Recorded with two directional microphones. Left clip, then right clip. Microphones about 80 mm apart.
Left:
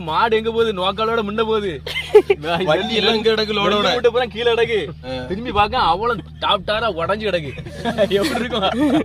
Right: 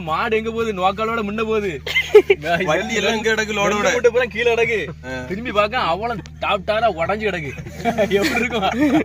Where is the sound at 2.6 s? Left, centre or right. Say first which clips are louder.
Left 6 dB; left.